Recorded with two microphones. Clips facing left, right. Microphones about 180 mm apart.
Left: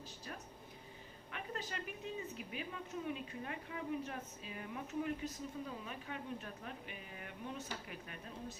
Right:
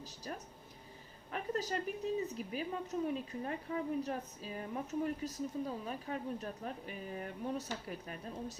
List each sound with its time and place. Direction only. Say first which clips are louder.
0.3 s a woman's voice: right 6 dB; 40° right (ahead or behind)